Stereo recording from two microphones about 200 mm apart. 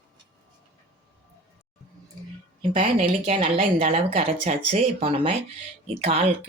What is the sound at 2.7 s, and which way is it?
Speech, 30° right (ahead or behind).